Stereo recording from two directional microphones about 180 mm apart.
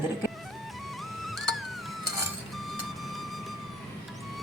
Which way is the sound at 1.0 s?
Centre (ahead or behind).